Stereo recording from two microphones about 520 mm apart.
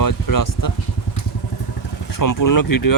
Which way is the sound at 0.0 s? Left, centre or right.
Left.